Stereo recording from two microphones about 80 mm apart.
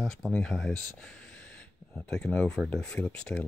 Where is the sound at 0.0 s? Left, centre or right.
Centre.